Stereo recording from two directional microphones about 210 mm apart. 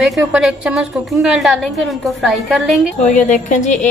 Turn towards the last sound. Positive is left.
turn(degrees=35)  # may be behind; listen again after turning